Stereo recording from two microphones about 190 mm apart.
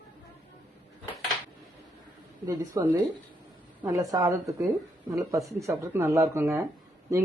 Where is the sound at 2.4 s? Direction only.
20° right (ahead or behind).